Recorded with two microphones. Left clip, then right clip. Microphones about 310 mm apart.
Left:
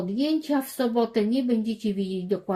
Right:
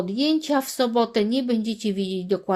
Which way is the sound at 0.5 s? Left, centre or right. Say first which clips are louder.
Right 4 dB; right.